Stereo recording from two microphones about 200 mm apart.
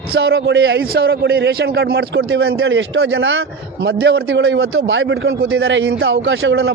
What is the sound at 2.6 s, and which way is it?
Speech, 70° right (ahead or behind).